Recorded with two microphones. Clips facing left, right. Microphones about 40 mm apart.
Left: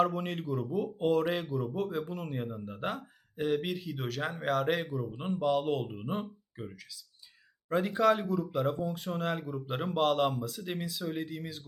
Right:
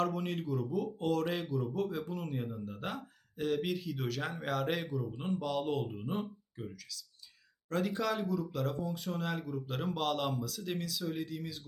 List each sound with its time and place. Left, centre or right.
0.1 s a man's voice: centre
1.8 s a man's voice: centre
5.5 s speech: centre
6.6 s a man's voice: centre
8.9 s a man's voice: centre
9.5 s a man's voice: left